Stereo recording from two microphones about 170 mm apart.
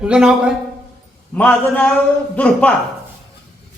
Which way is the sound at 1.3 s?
10° left (ahead or behind).